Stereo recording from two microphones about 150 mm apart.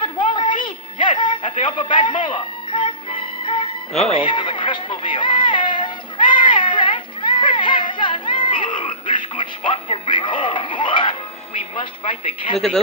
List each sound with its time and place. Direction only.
0.0 s music: 35° left (ahead or behind)
4.1 s a sound: 35° left (ahead or behind)
11.8 s a woman's voice: 35° left (ahead or behind)